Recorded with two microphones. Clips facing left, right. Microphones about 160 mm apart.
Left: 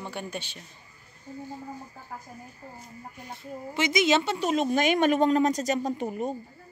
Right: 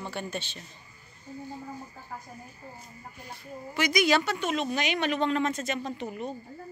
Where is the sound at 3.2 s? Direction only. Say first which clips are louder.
Left 3 dB; 25° left (ahead or behind); by 6.3 s 45° left (ahead or behind).